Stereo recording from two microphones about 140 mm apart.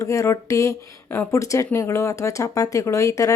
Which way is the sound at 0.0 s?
20° left (ahead or behind).